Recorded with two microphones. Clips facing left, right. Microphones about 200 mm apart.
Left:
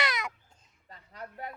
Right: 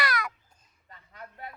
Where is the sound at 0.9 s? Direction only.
35° left (ahead or behind).